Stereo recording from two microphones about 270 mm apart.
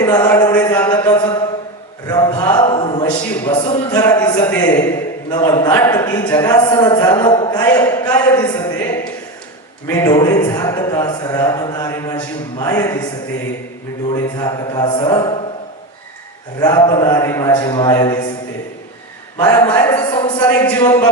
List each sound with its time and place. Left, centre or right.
0.0 s a sound: centre
3.5 s speech: centre
14.1 s speech: centre
16.6 s speech: centre
19.4 s speech: centre